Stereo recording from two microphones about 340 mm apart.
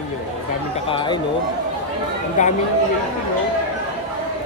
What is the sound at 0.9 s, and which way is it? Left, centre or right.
Speech, centre.